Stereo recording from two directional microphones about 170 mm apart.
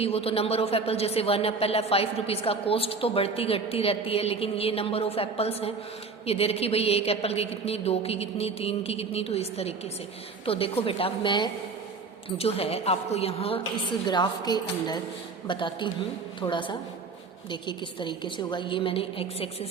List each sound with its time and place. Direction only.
0.0 s speech: 35° left (ahead or behind)
14.1 s speech: 25° left (ahead or behind)